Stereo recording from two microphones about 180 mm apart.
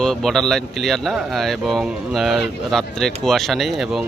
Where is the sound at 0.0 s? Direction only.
Centre (ahead or behind).